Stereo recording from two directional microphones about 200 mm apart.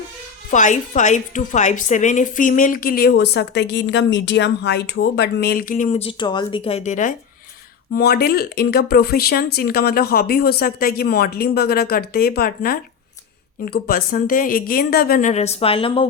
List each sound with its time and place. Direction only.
0.5 s a woman's voice: 40° left (ahead or behind)
7.9 s speech: 50° left (ahead or behind); by 16.0 s 30° left (ahead or behind)